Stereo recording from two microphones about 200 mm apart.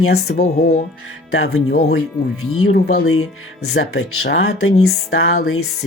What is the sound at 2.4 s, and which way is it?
Speech, 90° left.